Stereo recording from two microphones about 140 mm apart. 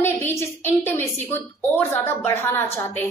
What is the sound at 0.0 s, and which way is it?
A woman's voice, 15° left (ahead or behind).